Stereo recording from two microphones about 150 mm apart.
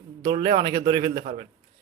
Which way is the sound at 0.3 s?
35° right (ahead or behind).